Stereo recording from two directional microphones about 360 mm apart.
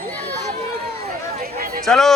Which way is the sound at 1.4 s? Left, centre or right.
Right.